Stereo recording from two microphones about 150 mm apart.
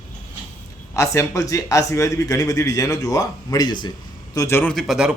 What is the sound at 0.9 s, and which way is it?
A man's voice, 20° left (ahead or behind).